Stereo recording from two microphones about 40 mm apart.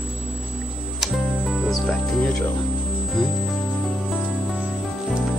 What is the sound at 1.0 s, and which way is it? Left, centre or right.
Music, centre.